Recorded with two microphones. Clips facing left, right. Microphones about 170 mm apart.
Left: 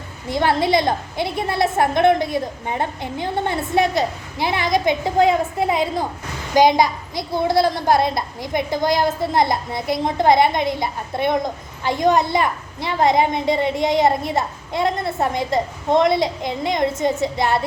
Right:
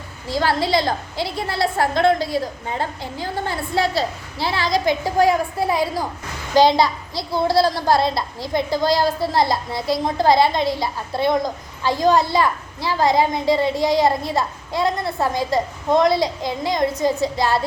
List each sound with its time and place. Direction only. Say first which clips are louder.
0.3 s a woman's voice: left 2 dB; 20° left (ahead or behind)